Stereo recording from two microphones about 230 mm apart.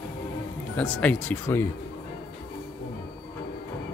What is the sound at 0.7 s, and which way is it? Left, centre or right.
Speech, centre.